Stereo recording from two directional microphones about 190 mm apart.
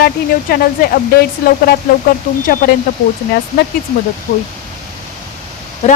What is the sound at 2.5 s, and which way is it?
Speech, 50° left (ahead or behind).